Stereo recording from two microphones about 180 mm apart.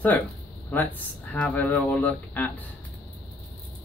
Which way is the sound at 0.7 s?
10° left (ahead or behind).